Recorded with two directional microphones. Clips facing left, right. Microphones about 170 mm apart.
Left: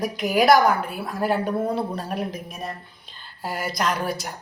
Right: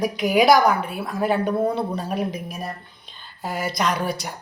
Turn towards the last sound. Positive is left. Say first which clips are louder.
# right 1 dB
turn(degrees=0)  # may be behind; listen again after turning